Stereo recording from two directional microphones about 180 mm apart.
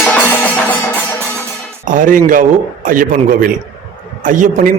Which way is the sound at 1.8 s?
45° right (ahead or behind).